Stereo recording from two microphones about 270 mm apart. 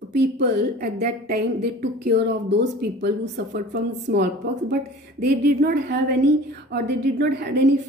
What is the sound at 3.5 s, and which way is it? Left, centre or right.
A woman's voice, right.